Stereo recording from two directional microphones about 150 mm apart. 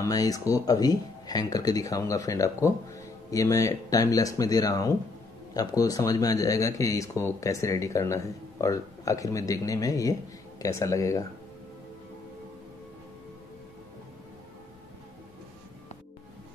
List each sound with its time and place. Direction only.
0.0 s speech: 25° left (ahead or behind)